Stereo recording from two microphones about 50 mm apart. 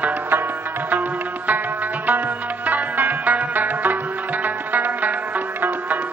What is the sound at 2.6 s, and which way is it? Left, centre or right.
Music, right.